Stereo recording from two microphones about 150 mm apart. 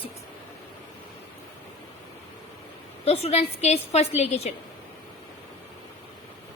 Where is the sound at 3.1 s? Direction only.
45° left (ahead or behind).